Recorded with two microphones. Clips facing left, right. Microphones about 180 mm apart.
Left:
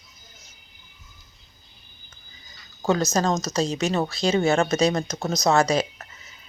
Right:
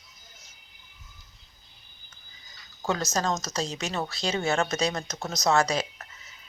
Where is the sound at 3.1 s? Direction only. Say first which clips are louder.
Left 5 dB; 20° left (ahead or behind).